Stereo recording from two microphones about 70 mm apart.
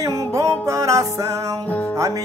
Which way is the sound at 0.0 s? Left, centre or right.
Right.